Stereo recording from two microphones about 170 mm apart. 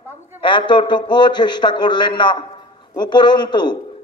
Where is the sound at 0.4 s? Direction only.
30° left (ahead or behind).